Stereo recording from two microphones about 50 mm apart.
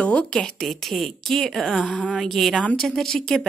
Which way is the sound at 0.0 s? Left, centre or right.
Left.